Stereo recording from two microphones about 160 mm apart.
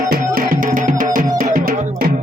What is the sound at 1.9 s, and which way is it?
Music, 65° right (ahead or behind).